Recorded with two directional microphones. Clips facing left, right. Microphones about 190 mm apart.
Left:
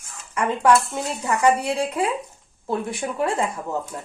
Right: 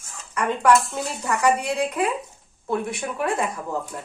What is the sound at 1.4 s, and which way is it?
Speech, 30° left (ahead or behind).